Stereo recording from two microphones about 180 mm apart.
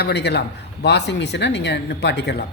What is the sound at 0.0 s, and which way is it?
A man's voice, 70° left (ahead or behind).